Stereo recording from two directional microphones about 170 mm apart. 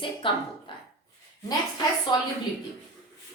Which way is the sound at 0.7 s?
30° left (ahead or behind).